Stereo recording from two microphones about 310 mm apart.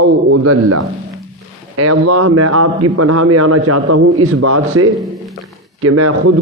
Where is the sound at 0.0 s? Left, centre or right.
Right.